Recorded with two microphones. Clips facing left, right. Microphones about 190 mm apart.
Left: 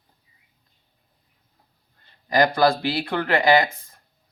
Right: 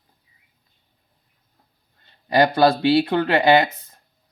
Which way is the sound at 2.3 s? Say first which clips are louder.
Right 2 dB; 25° right (ahead or behind).